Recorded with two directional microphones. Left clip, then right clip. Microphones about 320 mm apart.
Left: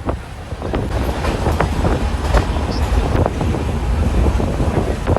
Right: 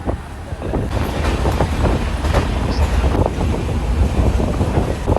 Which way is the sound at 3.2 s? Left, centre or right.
Centre.